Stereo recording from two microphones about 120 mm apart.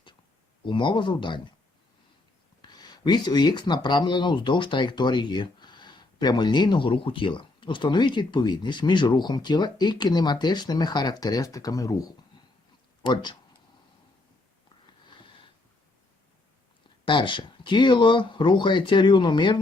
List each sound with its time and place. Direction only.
0.6 s speech: 40° left (ahead or behind)
2.6 s speech: 35° left (ahead or behind)
13.0 s speech: 40° left (ahead or behind)
17.1 s speech: 40° left (ahead or behind)